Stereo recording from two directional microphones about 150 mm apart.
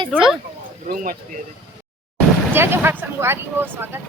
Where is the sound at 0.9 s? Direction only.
70° right (ahead or behind).